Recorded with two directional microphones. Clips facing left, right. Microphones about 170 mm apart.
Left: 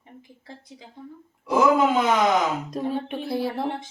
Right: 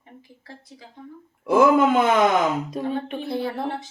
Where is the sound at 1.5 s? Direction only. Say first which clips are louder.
Right 3 dB; 55° right (ahead or behind).